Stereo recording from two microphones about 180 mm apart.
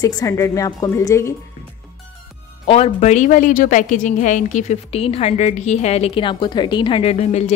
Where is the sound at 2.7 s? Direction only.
35° left (ahead or behind).